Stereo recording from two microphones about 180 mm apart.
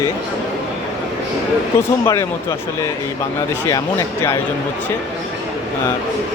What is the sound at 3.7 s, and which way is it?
Speech, 15° left (ahead or behind).